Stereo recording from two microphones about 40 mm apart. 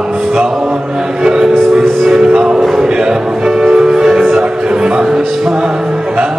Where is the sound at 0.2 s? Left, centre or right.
Centre.